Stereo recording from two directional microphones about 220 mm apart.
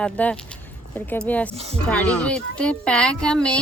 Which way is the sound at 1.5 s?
25° right (ahead or behind).